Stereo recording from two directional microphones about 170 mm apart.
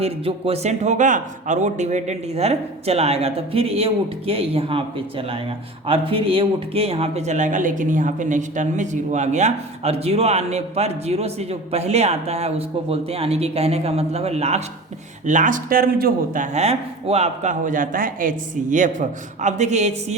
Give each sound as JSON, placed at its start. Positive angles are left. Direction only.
{"t": 0.0, "sound": "speech", "side_deg": -35}
{"t": 15.3, "sound": "speech", "side_deg": -50}